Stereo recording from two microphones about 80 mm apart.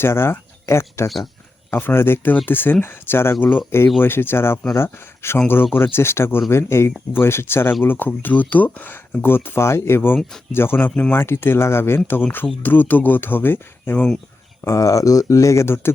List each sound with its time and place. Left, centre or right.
0.0 s speech: left
14.6 s speech: left